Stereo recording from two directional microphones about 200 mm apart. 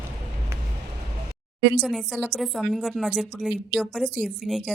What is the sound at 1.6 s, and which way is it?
Speech, 60° right (ahead or behind).